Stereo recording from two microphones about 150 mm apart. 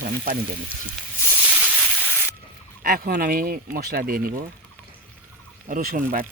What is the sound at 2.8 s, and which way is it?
Speech, 70° right (ahead or behind).